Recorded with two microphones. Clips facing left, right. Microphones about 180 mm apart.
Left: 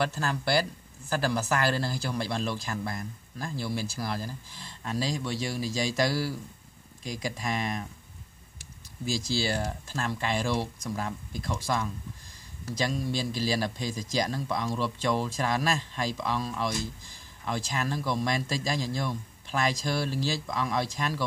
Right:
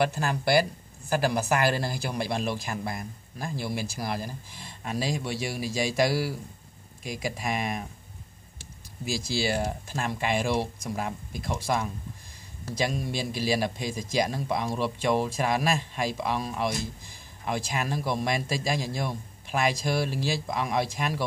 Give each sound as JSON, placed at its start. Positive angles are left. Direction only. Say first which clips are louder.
{"t": 0.0, "sound": "speech", "louder": "right 3 dB", "side_deg": -15}
{"t": 9.3, "sound": "speech", "louder": "right 4 dB", "side_deg": -15}